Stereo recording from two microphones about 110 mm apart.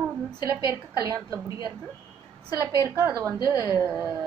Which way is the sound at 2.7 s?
25° right (ahead or behind).